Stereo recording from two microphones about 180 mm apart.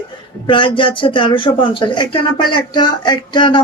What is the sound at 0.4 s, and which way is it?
Speech, 25° left (ahead or behind).